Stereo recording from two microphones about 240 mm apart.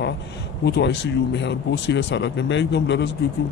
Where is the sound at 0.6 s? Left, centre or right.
Left.